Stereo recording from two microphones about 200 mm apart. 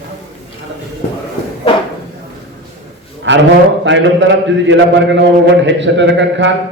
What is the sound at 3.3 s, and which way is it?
A man's voice, 65° right (ahead or behind).